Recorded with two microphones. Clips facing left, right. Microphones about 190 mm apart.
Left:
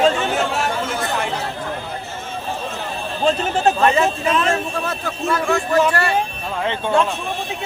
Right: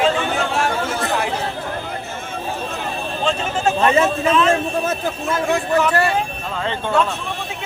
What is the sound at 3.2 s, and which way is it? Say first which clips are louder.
Speech: left 3 dB; 40° left (ahead or behind).